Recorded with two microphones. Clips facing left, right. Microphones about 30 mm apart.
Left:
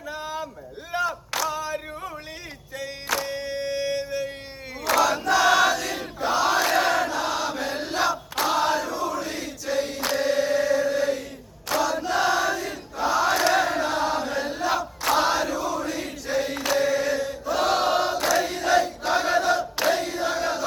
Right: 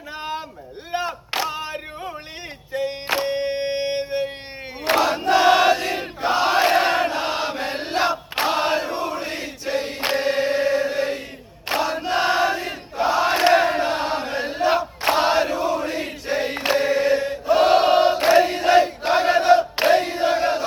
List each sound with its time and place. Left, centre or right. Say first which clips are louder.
0.1 s a sound: right 2 dB; right
2.7 s music: right 5 dB; right
4.8 s crowd: right 2 dB; right